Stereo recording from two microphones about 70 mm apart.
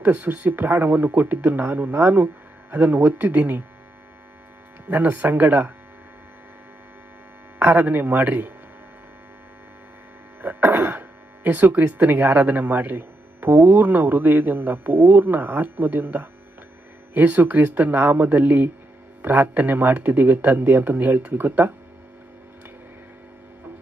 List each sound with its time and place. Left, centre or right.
0.0 s a man's voice: right
4.9 s a man's voice: right
7.6 s a man's voice: right
10.4 s a sound: right
11.4 s a man's voice: right